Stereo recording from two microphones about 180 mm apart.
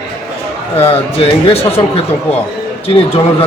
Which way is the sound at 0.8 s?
30° left (ahead or behind).